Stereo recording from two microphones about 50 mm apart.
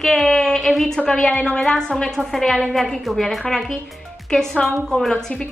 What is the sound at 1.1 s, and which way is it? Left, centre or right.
A woman's voice, centre.